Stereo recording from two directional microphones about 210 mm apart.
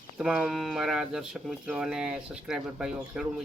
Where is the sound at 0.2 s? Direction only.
5° right (ahead or behind).